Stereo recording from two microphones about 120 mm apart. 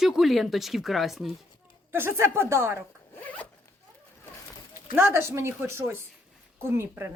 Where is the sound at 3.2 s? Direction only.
10° left (ahead or behind).